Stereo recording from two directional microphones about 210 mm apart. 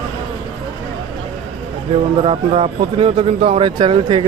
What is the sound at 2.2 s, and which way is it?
Speech, 25° right (ahead or behind).